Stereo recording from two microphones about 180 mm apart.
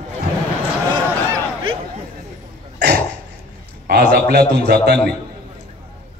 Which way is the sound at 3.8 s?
60° right (ahead or behind).